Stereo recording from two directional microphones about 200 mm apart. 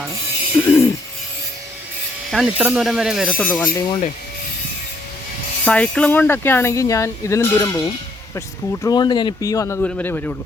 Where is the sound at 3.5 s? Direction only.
10° left (ahead or behind).